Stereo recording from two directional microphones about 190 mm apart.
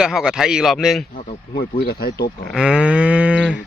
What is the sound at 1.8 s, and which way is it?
Speech, 55° left (ahead or behind).